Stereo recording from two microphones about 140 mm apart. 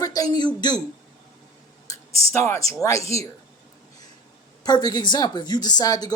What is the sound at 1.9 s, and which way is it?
Speech, 20° left (ahead or behind).